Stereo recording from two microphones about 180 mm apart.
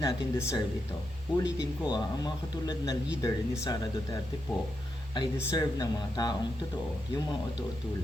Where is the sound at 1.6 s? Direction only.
20° left (ahead or behind).